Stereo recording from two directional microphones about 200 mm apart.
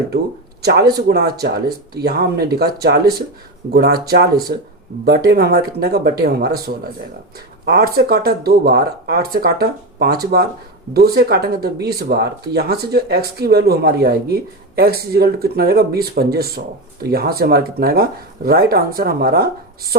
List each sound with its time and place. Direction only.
0.6 s speech: 55° right (ahead or behind)